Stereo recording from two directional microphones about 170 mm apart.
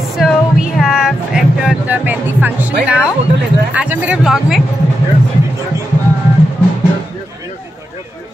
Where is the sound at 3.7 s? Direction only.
10° right (ahead or behind).